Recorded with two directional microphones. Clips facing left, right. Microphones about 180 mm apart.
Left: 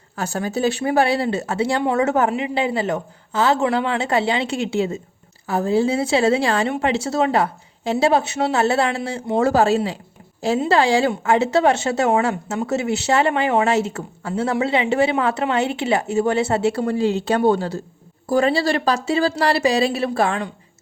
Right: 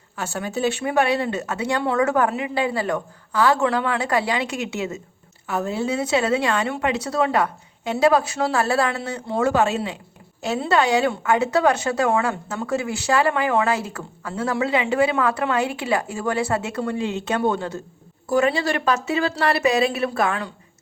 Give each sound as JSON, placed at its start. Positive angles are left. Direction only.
{"t": 0.2, "sound": "speech", "side_deg": 40}